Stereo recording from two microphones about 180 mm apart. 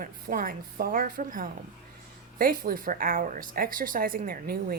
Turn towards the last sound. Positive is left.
turn(degrees=-55)  # may be behind; listen again after turning